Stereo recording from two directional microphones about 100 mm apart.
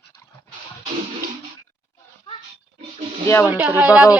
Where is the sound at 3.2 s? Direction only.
30° left (ahead or behind).